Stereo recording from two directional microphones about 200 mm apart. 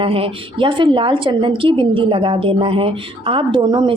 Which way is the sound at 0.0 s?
25° right (ahead or behind).